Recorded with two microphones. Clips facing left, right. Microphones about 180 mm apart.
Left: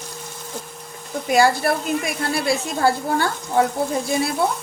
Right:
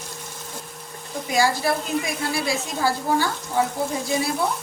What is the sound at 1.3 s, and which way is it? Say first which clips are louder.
Speech: left 4 dB; 60° left (ahead or behind).